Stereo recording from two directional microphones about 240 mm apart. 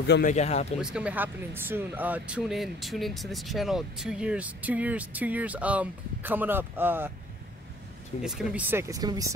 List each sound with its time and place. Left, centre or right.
0.0 s speech: left
0.3 s speech: left
0.7 s speech: centre
8.2 s speech: centre